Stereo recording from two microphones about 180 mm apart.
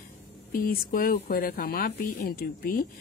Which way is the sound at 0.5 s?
55° left (ahead or behind).